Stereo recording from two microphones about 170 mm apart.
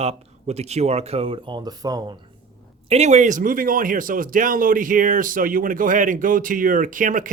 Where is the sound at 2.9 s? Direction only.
45° right (ahead or behind).